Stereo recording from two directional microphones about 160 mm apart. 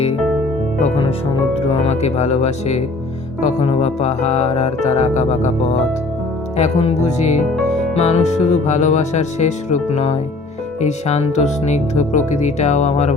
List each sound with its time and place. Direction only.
1.5 s speech: 40° left (ahead or behind)